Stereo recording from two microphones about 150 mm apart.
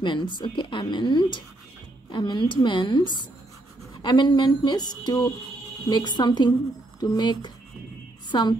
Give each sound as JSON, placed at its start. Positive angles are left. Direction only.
{"t": 0.0, "sound": "a woman's voice", "side_deg": 30}